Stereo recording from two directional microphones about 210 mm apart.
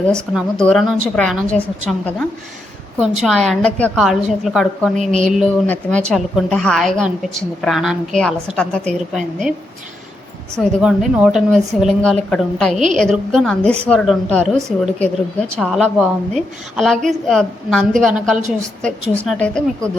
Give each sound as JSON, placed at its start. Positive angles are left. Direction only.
{"t": 0.0, "sound": "a woman's voice", "side_deg": 5}
{"t": 4.9, "sound": "speech", "side_deg": -35}
{"t": 5.6, "sound": "a woman's voice", "side_deg": 10}
{"t": 10.6, "sound": "a woman's voice", "side_deg": 0}